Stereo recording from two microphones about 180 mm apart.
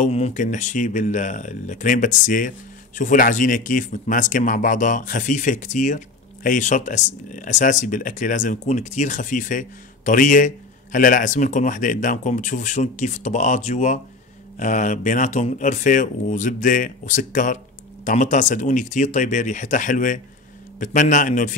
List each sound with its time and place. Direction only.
0.0 s speech: 40° left (ahead or behind)